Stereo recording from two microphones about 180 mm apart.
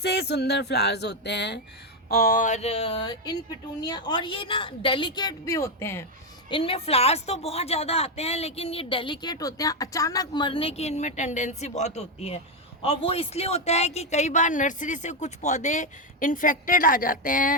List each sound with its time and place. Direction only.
0.0 s a sound: 70° left (ahead or behind)
2.0 s a woman's voice: 55° left (ahead or behind); by 6.1 s 15° left (ahead or behind)
6.5 s a woman's voice: 30° left (ahead or behind); by 17.5 s 50° left (ahead or behind)